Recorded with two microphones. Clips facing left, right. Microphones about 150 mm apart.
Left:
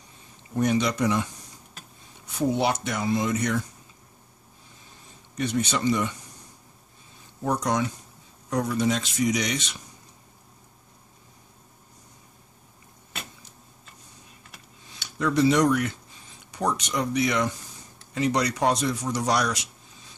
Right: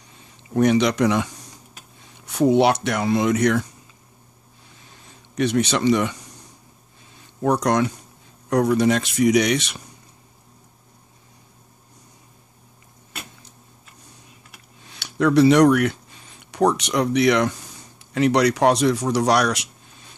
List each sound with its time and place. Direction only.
0.6 s speech: 80° right
4.8 s a sound: 80° right
7.2 s speech: 75° right (ahead or behind)
14.8 s speech: 70° right (ahead or behind)